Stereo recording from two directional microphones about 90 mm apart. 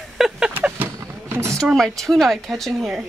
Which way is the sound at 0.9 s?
35° right (ahead or behind).